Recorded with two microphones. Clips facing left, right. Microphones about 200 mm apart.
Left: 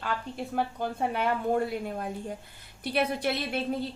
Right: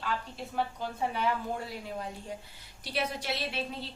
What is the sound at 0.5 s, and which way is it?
A woman's voice, 55° left (ahead or behind).